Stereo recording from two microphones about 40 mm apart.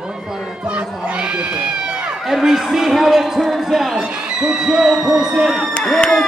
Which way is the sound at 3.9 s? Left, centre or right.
Right.